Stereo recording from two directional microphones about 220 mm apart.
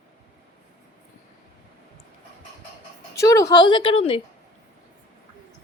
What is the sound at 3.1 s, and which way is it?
A woman's voice, 15° left (ahead or behind).